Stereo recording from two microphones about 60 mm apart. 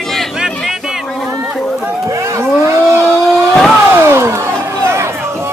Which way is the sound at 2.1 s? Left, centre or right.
Right.